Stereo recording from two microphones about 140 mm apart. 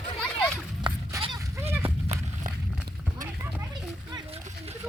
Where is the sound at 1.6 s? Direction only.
50° right (ahead or behind).